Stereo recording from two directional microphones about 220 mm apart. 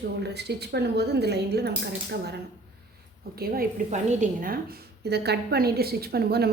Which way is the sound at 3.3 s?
45° right (ahead or behind).